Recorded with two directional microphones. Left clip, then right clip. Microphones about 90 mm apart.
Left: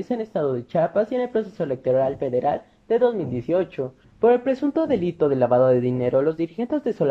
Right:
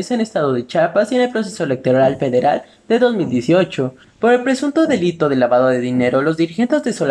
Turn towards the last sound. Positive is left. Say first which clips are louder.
# right 6 dB
turn(degrees=45)  # may be behind; listen again after turning